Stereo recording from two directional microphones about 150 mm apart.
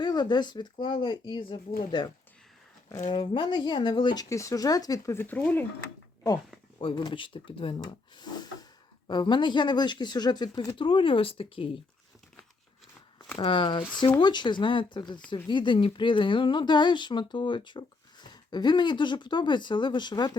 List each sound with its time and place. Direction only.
0.0 s speech: 30° left (ahead or behind)
3.1 s speech: 30° left (ahead or behind); by 5.6 s 10° left (ahead or behind)
6.7 s speech: 35° left (ahead or behind)
13.3 s speech: 35° left (ahead or behind)